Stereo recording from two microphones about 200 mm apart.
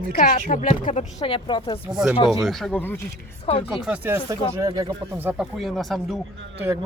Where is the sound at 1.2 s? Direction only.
25° left (ahead or behind).